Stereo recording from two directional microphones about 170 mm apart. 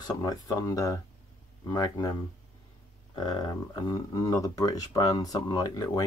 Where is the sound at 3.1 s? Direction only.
25° left (ahead or behind).